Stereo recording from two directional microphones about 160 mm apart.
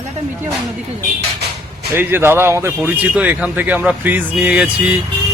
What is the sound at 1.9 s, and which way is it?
A man's voice, 15° right (ahead or behind).